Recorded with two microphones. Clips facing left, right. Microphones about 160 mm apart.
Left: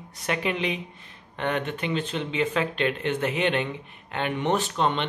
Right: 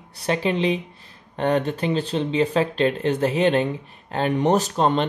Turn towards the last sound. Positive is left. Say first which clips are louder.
# right 5 dB
turn(degrees=-40)  # may be behind; listen again after turning